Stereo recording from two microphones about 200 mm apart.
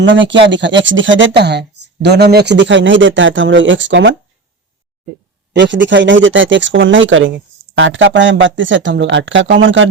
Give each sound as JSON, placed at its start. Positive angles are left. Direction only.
{"t": 0.0, "sound": "speech", "side_deg": -65}
{"t": 5.5, "sound": "speech", "side_deg": -65}